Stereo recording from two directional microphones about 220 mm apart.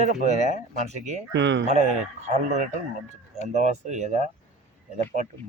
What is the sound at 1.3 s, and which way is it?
Speech, 55° right (ahead or behind).